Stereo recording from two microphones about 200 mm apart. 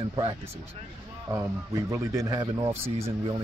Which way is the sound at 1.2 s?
15° right (ahead or behind).